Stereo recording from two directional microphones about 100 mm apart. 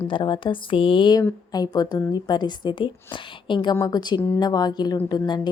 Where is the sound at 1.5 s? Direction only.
40° left (ahead or behind).